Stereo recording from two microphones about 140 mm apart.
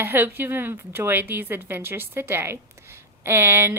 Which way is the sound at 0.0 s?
15° right (ahead or behind).